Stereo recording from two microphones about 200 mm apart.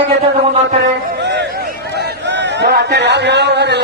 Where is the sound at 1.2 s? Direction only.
55° right (ahead or behind).